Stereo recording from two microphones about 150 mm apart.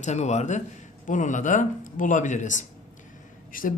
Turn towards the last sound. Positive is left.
turn(degrees=65)  # may be behind; listen again after turning